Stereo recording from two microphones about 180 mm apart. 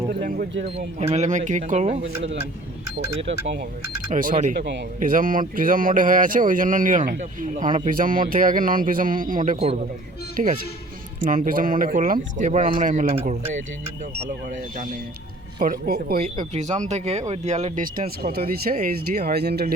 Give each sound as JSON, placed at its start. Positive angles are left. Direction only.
{"t": 0.8, "sound": "speech", "side_deg": -40}
{"t": 4.1, "sound": "speech", "side_deg": -45}
{"t": 4.5, "sound": "a man's voice", "side_deg": -70}
{"t": 4.9, "sound": "speech", "side_deg": -50}
{"t": 15.5, "sound": "speech", "side_deg": -50}
{"t": 16.4, "sound": "speech", "side_deg": -40}
{"t": 18.2, "sound": "speech", "side_deg": -55}